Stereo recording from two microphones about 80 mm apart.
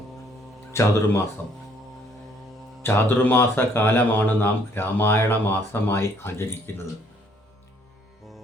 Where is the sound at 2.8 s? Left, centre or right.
Left.